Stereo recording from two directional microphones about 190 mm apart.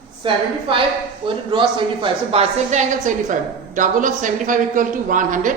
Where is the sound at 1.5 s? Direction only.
25° right (ahead or behind); by 5.5 s 45° right (ahead or behind).